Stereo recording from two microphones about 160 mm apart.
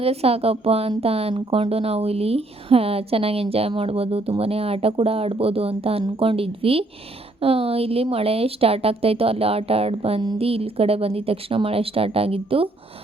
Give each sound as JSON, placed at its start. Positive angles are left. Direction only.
{"t": 0.0, "sound": "speech", "side_deg": -40}